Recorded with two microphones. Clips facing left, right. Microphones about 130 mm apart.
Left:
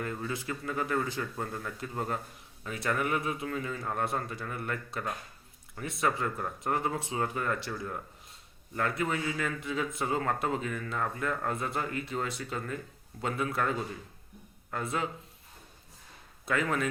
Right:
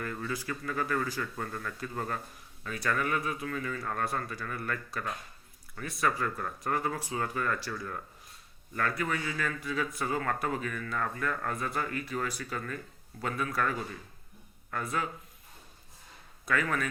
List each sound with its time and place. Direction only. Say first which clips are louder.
0.0 s speech: left 1 dB; 20° left (ahead or behind)
16.5 s speech: left 1 dB; 25° left (ahead or behind)